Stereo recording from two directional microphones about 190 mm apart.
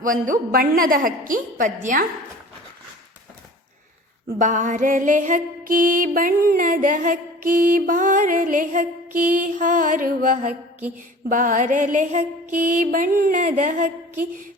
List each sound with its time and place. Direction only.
0.0 s music: 45° right (ahead or behind)
4.4 s music: 45° right (ahead or behind)